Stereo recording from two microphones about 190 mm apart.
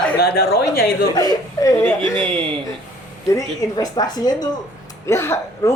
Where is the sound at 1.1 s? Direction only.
20° left (ahead or behind).